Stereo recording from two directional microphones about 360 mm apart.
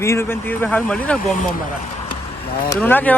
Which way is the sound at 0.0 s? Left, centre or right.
Centre.